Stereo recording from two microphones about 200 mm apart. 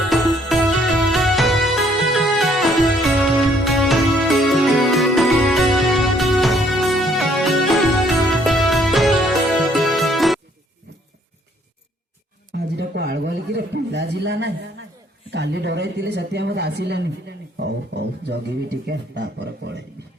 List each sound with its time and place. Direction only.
0.1 s music: centre (ahead or behind)
12.5 s a sound: 55° right (ahead or behind)
15.3 s speech: 60° right (ahead or behind)